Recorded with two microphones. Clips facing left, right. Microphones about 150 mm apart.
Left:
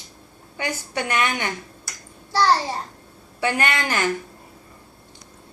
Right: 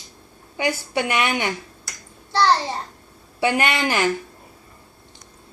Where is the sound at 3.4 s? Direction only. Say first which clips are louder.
Right 3 dB; 15° right (ahead or behind).